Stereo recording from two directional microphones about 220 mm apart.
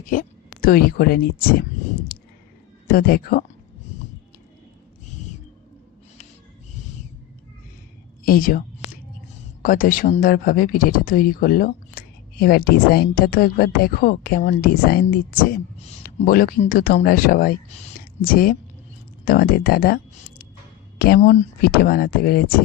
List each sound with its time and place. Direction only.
0.0 s speech: 40° left (ahead or behind)
2.1 s a sound: 45° left (ahead or behind)
2.8 s speech: 40° left (ahead or behind)
8.2 s a woman's voice: 40° left (ahead or behind)
9.6 s speech: 40° left (ahead or behind)
21.2 s speech: 30° left (ahead or behind)